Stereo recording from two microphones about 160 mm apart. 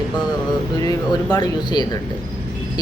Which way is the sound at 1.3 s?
25° left (ahead or behind).